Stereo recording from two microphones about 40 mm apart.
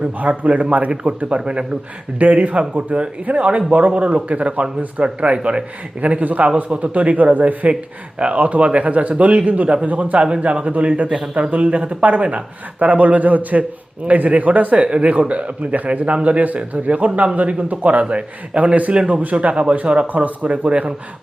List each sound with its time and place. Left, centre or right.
0.0 s speech: right
14.8 s speech: right
18.5 s speech: right